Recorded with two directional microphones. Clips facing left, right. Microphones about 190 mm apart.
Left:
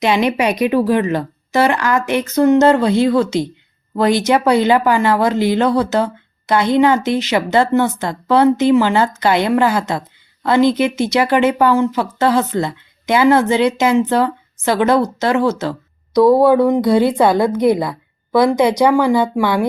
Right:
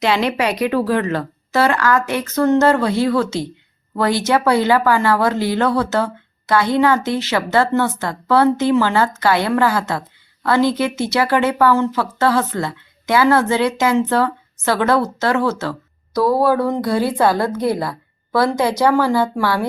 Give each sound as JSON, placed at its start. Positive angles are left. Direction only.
{"t": 0.0, "sound": "a woman's voice", "side_deg": 15}